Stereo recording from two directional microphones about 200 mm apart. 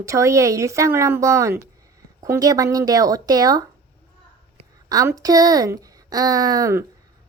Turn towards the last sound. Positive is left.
turn(degrees=-15)  # may be behind; listen again after turning